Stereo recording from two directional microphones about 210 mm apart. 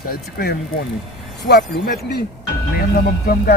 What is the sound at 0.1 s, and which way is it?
Speech, 45° left (ahead or behind).